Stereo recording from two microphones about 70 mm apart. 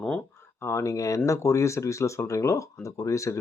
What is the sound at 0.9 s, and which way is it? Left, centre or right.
Speech, left.